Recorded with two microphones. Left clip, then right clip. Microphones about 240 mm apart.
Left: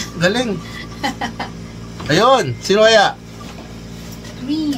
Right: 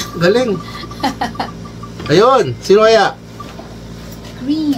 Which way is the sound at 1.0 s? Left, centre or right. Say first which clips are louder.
Right 4 dB; right.